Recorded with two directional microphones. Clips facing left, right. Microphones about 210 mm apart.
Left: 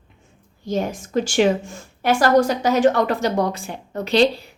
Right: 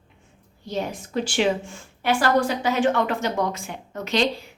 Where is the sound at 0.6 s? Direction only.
45° left (ahead or behind).